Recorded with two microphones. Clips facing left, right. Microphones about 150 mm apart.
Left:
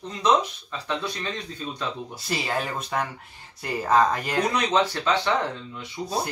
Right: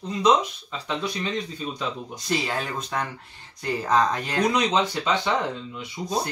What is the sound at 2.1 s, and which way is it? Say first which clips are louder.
Speech: right 1 dB; 5° left (ahead or behind).